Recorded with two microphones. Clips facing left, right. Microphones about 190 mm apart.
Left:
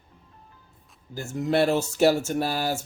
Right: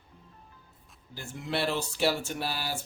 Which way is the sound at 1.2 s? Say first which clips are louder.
Left 9 dB; 45° left (ahead or behind).